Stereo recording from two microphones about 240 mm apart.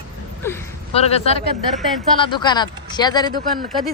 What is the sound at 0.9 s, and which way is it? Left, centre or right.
Speech, left.